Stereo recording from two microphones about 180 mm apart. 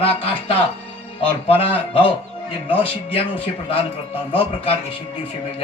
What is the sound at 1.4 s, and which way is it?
Speech, 30° left (ahead or behind).